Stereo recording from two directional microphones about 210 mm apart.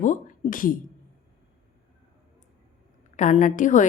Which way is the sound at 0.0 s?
35° left (ahead or behind).